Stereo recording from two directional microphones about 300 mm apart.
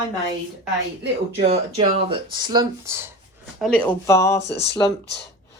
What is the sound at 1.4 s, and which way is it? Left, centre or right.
Speech, centre.